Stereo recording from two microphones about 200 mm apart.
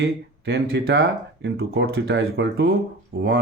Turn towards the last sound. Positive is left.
turn(degrees=-50)  # may be behind; listen again after turning